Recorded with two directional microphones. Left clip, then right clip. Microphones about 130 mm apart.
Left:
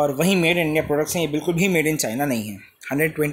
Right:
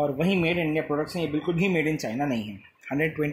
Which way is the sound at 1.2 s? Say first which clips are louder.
Left 5 dB; 80° left.